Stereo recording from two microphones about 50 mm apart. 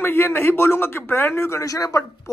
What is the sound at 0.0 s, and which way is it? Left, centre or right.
Speech, left.